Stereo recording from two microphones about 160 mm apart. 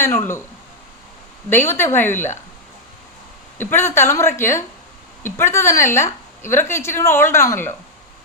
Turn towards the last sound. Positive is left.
turn(degrees=15)  # may be behind; listen again after turning